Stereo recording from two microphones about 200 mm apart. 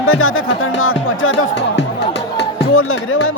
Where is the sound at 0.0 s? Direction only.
90° left; by 1.8 s 75° left (ahead or behind).